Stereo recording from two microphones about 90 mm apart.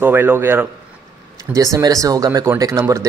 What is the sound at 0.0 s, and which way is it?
Speech, 20° right (ahead or behind).